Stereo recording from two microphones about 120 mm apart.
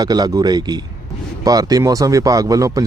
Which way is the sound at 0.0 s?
35° right (ahead or behind).